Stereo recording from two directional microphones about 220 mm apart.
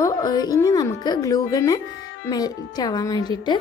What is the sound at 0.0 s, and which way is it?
A woman's voice, 15° left (ahead or behind).